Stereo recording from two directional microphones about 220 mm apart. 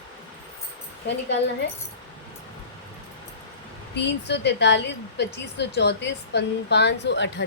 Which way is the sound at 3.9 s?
50° left (ahead or behind).